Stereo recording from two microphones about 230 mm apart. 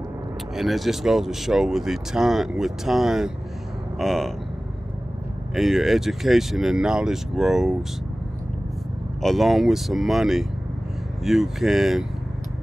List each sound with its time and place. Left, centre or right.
0.6 s speech: centre
5.5 s speech: centre
9.2 s speech: centre